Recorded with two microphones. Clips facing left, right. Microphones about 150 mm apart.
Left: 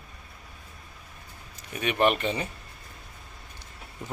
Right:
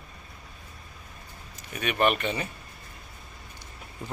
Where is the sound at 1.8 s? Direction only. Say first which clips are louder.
Left 1 dB; 25° left (ahead or behind).